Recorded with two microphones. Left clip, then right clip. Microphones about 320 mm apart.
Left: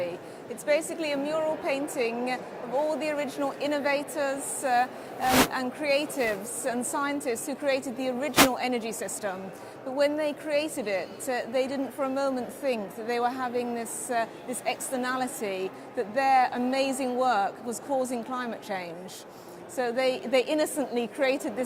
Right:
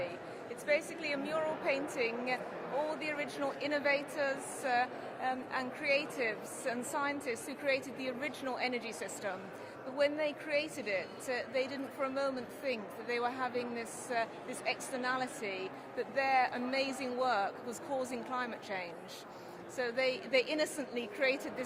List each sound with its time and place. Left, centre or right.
0.6 s a woman's voice: left